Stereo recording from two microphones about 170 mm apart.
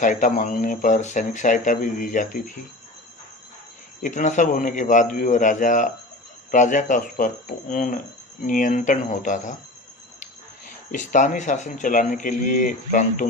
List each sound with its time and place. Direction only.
0.0 s speech: 50° left (ahead or behind)
4.0 s speech: 45° left (ahead or behind)
10.9 s speech: 45° left (ahead or behind)